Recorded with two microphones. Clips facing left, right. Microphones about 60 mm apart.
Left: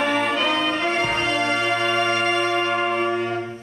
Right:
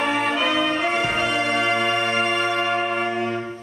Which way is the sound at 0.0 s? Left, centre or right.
Centre.